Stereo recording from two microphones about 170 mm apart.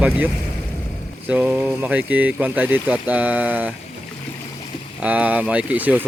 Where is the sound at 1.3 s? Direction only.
10° right (ahead or behind).